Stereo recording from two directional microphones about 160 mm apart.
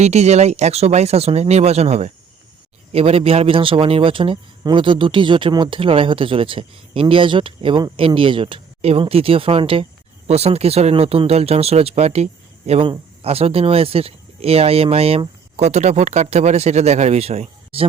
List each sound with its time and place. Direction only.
0.0 s speech: 45° right (ahead or behind)